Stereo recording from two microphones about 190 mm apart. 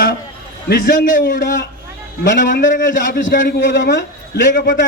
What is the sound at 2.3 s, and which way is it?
Speech, 70° left (ahead or behind).